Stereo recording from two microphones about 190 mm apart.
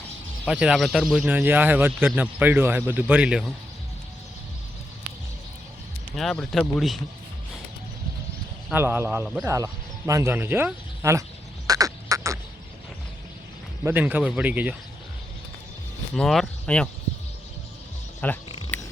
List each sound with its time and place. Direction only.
0.4 s speech: 5° right (ahead or behind)
6.1 s speech: centre (ahead or behind)
8.7 s speech: 10° right (ahead or behind)
10.1 s frog: 15° right (ahead or behind)
13.8 s speech: 10° right (ahead or behind)
16.1 s speech: centre (ahead or behind)
18.2 s speech: 10° left (ahead or behind)
18.7 s a sound: 10° left (ahead or behind)